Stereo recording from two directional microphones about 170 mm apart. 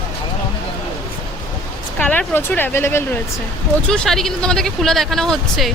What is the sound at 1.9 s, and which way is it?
Speech, 10° left (ahead or behind).